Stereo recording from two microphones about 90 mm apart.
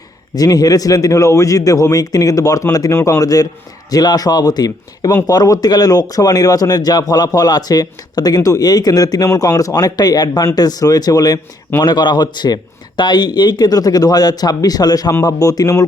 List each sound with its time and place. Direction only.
0.3 s a man's voice: 45° left (ahead or behind)
11.9 s a man's voice: 55° left (ahead or behind); by 15.8 s 40° left (ahead or behind)